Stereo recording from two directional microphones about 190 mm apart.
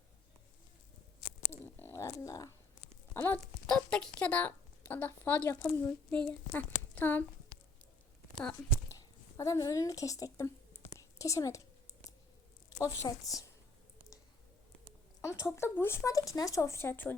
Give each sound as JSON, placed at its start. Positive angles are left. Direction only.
{"t": 1.6, "sound": "a sound", "side_deg": 10}
{"t": 3.1, "sound": "speech", "side_deg": 10}
{"t": 8.9, "sound": "speech", "side_deg": 15}
{"t": 10.9, "sound": "whispering", "side_deg": 15}
{"t": 12.8, "sound": "speech", "side_deg": 15}
{"t": 15.5, "sound": "speech", "side_deg": 10}